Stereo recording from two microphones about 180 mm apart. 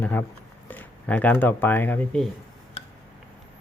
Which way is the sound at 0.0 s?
10° left (ahead or behind).